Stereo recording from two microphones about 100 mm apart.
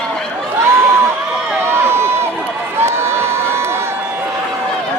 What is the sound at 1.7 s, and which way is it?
Run, 25° right (ahead or behind).